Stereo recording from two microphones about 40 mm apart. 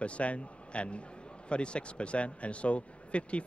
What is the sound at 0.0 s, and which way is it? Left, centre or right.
A man's voice, left.